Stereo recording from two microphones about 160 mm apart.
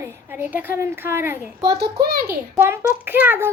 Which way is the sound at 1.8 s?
80° right.